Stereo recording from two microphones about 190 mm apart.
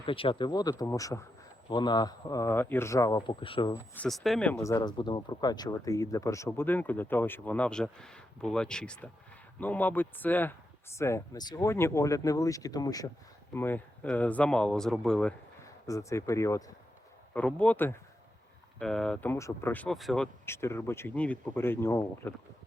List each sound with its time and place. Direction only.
0.0 s a man's voice: 30° left (ahead or behind)
3.7 s speech: 5° left (ahead or behind)
17.3 s speech: 5° left (ahead or behind)